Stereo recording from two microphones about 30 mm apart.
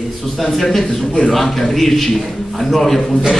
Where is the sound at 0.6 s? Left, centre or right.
Centre.